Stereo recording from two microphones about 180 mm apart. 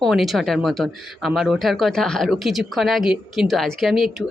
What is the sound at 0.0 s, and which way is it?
Speech, centre (ahead or behind).